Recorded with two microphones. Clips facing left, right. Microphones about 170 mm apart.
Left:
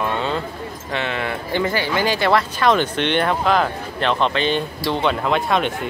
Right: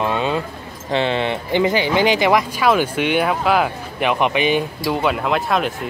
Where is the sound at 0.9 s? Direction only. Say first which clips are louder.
Right 5 dB; 30° right (ahead or behind).